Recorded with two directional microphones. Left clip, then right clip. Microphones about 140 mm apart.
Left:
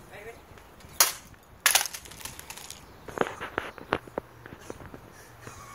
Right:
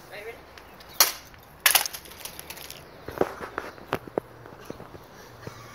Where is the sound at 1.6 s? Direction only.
40° right (ahead or behind).